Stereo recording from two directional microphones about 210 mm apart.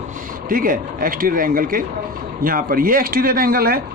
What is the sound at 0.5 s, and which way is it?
Speech, 40° right (ahead or behind).